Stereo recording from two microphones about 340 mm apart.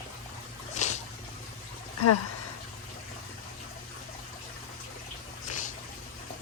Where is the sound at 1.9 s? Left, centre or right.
Left.